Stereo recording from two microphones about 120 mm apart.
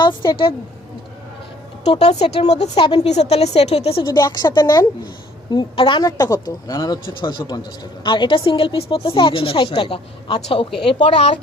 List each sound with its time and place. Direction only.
0.0 s a woman's voice: 40° left (ahead or behind)
2.0 s a woman's voice: 60° left (ahead or behind)
2.7 s a woman's voice: 50° left (ahead or behind)
3.1 s a woman's voice: 60° left (ahead or behind)
4.0 s a woman's voice: 40° left (ahead or behind)